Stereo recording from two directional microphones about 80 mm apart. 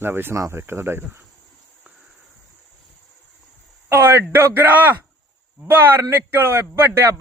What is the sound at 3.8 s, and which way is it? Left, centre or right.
A man's voice, right.